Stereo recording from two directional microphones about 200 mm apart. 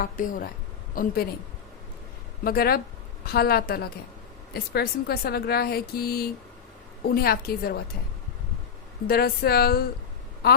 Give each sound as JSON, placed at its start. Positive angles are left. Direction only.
{"t": 0.0, "sound": "speech", "side_deg": 45}
{"t": 2.4, "sound": "speech", "side_deg": 50}
{"t": 9.0, "sound": "speech", "side_deg": 50}